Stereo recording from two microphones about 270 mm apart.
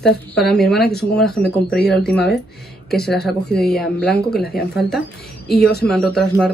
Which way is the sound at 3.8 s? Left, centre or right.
Centre.